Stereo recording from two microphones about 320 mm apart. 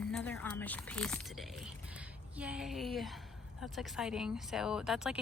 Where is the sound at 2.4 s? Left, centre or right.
Centre.